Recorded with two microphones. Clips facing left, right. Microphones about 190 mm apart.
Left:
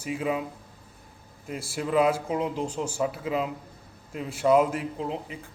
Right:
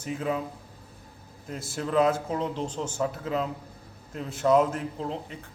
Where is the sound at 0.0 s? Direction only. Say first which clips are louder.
Left 1 dB; 10° left (ahead or behind).